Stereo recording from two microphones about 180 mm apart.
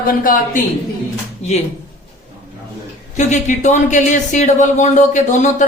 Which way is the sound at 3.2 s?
40° left (ahead or behind).